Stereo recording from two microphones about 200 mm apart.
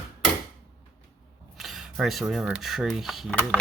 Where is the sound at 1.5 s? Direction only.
Centre (ahead or behind).